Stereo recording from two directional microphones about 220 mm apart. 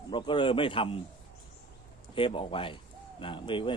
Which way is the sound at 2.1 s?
25° left (ahead or behind).